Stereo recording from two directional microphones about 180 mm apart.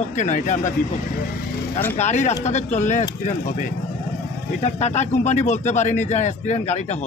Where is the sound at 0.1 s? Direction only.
45° left (ahead or behind).